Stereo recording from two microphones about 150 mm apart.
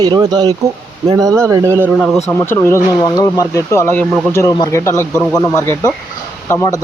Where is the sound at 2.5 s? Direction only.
15° left (ahead or behind).